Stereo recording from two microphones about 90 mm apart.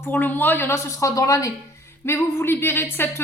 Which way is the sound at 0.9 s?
35° left (ahead or behind).